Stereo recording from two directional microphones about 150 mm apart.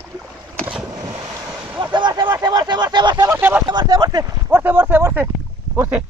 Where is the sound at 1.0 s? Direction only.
20° right (ahead or behind).